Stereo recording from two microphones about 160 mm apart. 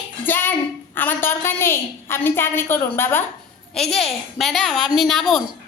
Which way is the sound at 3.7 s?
Centre (ahead or behind).